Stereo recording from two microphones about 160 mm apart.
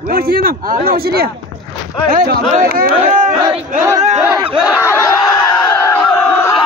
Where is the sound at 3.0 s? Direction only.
50° right (ahead or behind).